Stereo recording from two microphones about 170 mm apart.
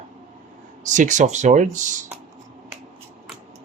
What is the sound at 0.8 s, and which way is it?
Speech, 45° right (ahead or behind).